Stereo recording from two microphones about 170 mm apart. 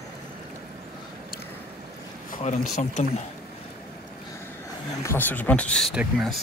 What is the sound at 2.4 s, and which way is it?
Speech, 45° left (ahead or behind).